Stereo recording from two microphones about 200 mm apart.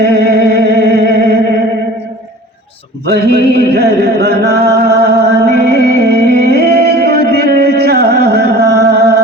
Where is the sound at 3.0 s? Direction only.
55° right (ahead or behind).